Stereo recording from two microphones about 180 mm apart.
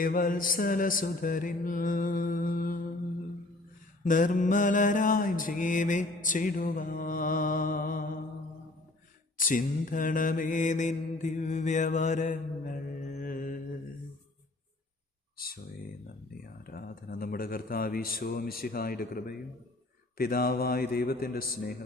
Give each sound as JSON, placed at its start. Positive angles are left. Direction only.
{"t": 0.0, "sound": "mantra", "side_deg": 50}
{"t": 4.0, "sound": "mantra", "side_deg": 45}
{"t": 9.4, "sound": "mantra", "side_deg": 50}
{"t": 16.6, "sound": "speech", "side_deg": 55}